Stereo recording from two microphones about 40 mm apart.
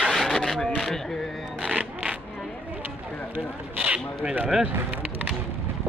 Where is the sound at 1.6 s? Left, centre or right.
Right.